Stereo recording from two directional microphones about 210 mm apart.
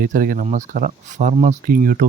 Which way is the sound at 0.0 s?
40° right (ahead or behind).